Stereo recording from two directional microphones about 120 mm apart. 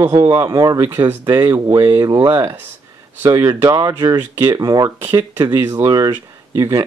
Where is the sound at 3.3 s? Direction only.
30° right (ahead or behind).